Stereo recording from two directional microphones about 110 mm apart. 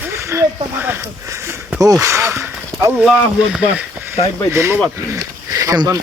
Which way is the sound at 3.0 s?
5° right (ahead or behind).